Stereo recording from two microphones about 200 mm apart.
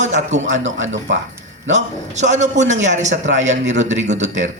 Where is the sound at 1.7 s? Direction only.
35° right (ahead or behind).